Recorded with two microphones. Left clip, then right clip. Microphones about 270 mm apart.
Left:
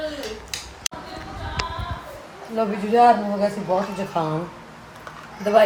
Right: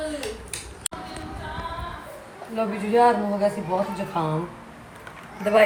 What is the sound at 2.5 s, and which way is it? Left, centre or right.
Speech, centre.